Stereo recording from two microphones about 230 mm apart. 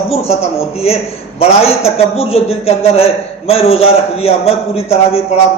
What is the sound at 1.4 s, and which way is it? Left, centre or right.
A man's voice, left.